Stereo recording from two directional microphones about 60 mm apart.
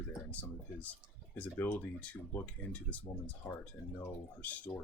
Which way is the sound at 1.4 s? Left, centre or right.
Left.